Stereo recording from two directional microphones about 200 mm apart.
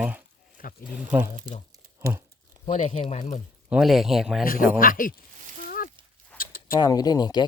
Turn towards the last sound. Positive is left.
turn(degrees=20)  # may be behind; listen again after turning